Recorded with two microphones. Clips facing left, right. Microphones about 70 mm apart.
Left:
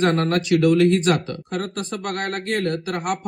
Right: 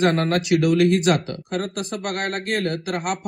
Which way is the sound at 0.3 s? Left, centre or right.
Left.